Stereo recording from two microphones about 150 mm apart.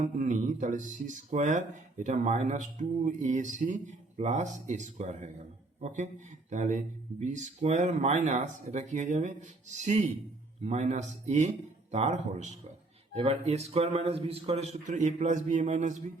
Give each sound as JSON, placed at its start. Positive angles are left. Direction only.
{"t": 0.0, "sound": "speech", "side_deg": -55}